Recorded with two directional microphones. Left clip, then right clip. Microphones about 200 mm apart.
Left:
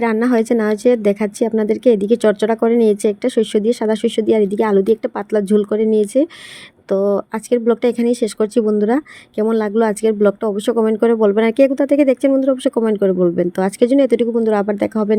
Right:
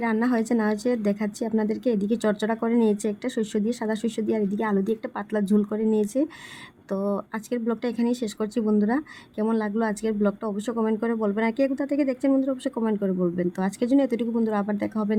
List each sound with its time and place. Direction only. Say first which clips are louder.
0.0 s speech: left 9 dB; 30° left (ahead or behind)